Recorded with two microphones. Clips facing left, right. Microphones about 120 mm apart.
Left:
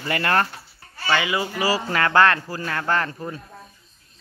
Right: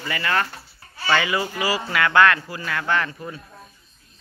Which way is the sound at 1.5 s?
35° left (ahead or behind).